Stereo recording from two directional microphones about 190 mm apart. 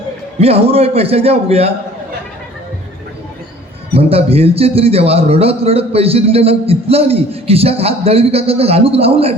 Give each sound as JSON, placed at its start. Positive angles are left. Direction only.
{"t": 0.3, "sound": "a man's voice", "side_deg": -30}
{"t": 3.9, "sound": "a man's voice", "side_deg": -30}